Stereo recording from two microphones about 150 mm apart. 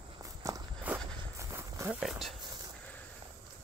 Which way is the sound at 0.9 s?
10° right (ahead or behind).